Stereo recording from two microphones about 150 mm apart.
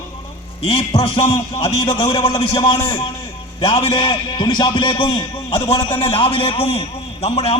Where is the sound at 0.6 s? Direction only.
35° left (ahead or behind).